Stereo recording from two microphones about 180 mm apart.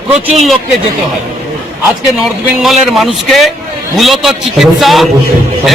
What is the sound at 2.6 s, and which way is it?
A man's voice, centre (ahead or behind).